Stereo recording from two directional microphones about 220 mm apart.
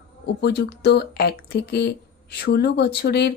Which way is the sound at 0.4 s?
50° left (ahead or behind).